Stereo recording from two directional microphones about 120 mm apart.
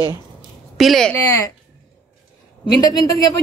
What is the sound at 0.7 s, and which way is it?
Speech, centre (ahead or behind).